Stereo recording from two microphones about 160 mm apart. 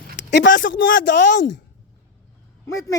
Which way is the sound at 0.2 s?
90° left.